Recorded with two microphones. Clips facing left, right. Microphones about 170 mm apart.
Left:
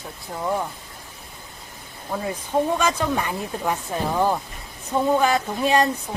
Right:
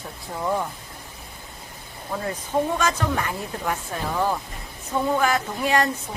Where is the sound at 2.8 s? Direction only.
15° left (ahead or behind).